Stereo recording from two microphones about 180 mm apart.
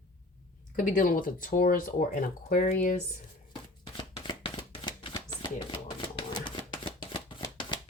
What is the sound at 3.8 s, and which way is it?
Chopping, 30° left (ahead or behind).